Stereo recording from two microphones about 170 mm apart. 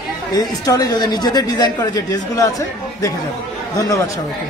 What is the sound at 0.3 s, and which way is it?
A woman's voice, 20° left (ahead or behind).